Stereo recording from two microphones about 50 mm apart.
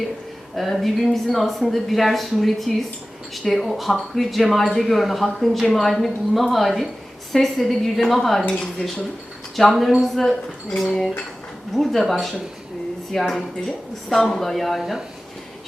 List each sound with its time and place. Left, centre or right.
0.5 s a woman's voice: centre
8.4 s cutlery: centre
9.6 s a woman's voice: centre
10.8 s cutlery: centre
11.7 s a woman's voice: centre
14.8 s speech: centre